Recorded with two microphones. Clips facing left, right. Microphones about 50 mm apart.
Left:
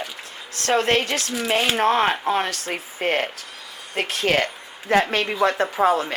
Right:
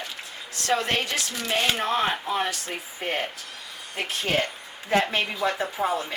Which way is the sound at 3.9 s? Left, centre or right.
Left.